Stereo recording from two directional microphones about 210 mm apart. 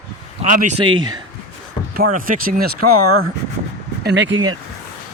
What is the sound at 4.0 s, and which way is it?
Speech, 55° right (ahead or behind).